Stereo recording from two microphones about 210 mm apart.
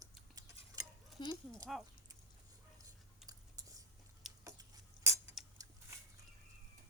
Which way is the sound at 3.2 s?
15° right (ahead or behind).